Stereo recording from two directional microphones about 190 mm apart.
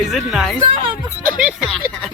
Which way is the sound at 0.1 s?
Centre (ahead or behind).